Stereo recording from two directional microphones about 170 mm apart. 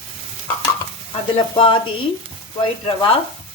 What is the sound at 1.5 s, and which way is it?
Speech, 30° left (ahead or behind).